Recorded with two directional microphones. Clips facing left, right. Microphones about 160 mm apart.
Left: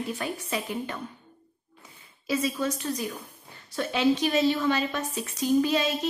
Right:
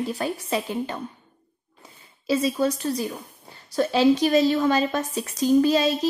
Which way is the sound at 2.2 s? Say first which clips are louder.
Right 5 dB; 30° right (ahead or behind).